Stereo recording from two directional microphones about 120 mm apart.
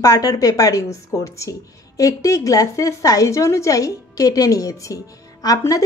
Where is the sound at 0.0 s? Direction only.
30° left (ahead or behind).